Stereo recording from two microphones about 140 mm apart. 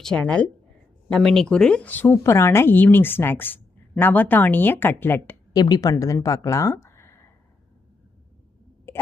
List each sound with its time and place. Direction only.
0.0 s speech: 5° left (ahead or behind)
5.5 s speech: 30° left (ahead or behind)
8.9 s a sound: 15° left (ahead or behind)